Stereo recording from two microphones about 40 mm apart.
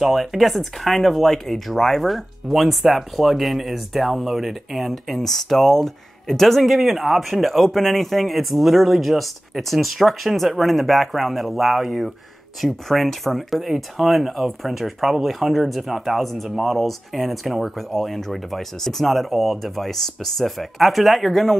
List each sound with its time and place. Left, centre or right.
0.0 s speech: centre